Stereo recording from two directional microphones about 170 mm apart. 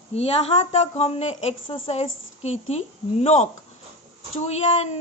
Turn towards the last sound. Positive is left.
turn(degrees=40)  # may be behind; listen again after turning